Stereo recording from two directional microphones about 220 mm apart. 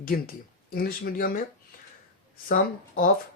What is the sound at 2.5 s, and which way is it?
Speech, 40° left (ahead or behind).